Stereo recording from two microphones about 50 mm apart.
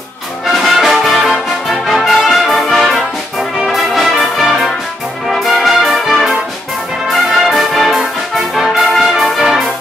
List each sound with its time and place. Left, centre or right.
0.5 s brass instrument: centre
5.3 s music: centre
8.5 s brass instrument: centre